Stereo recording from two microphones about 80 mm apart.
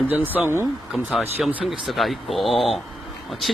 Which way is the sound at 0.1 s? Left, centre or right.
Right.